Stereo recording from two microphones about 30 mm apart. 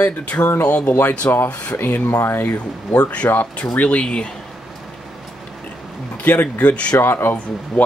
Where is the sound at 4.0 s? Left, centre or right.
Left.